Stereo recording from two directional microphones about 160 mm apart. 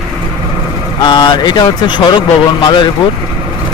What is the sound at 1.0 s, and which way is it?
Speech, 30° left (ahead or behind).